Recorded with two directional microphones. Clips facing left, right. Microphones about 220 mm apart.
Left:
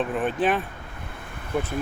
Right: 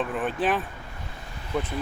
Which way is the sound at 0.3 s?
5° right (ahead or behind).